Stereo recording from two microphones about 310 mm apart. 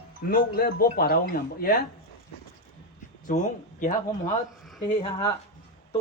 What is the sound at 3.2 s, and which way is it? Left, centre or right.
Speech, left.